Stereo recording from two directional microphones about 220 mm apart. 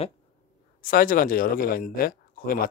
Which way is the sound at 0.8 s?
40° left (ahead or behind).